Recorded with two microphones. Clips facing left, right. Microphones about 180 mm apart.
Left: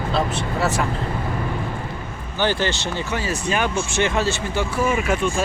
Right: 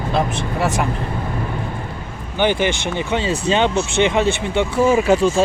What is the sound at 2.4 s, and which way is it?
Speech, 15° right (ahead or behind).